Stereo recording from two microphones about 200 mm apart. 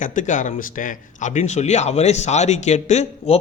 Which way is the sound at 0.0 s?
40° left (ahead or behind).